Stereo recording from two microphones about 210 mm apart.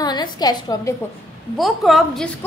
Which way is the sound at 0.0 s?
20° left (ahead or behind).